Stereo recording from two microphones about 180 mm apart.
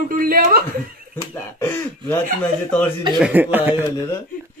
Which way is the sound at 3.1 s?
5° right (ahead or behind).